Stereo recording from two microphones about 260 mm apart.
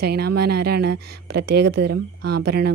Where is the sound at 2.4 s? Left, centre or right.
Right.